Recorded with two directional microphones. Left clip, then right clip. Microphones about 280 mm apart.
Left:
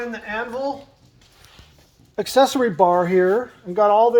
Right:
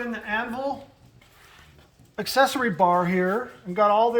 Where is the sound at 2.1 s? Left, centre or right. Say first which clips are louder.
Left 5 dB; left.